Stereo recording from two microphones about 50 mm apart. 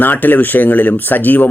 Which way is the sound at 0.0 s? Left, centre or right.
Left.